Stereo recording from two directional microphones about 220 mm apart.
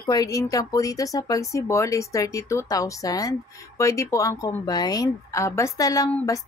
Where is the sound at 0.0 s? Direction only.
15° left (ahead or behind).